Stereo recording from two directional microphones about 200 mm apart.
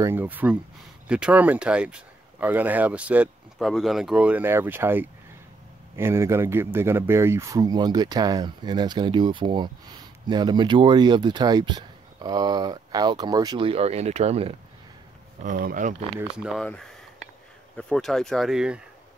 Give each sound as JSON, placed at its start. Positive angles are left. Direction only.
{"t": 0.0, "sound": "speech", "side_deg": -10}
{"t": 15.4, "sound": "speech", "side_deg": -45}
{"t": 16.4, "sound": "speech", "side_deg": 5}